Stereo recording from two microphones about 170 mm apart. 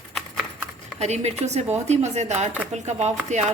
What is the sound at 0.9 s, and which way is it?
A woman's voice, 40° right (ahead or behind).